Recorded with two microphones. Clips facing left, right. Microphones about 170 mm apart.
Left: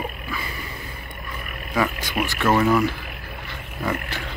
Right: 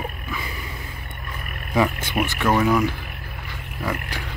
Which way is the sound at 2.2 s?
5° right (ahead or behind).